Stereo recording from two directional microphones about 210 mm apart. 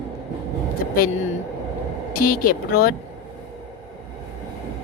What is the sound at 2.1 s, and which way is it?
Speech, 45° left (ahead or behind).